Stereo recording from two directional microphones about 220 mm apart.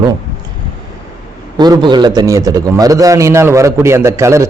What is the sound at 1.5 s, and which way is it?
A man's voice, 20° right (ahead or behind).